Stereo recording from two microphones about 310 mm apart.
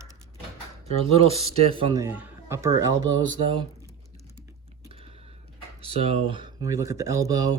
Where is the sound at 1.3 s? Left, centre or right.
Centre.